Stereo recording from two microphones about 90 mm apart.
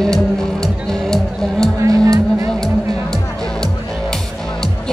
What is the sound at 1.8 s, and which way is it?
Music, 35° right (ahead or behind).